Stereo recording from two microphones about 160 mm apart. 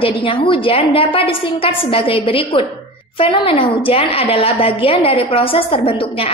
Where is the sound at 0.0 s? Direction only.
35° left (ahead or behind).